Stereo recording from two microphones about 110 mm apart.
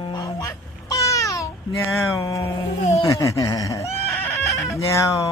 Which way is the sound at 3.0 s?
30° left (ahead or behind).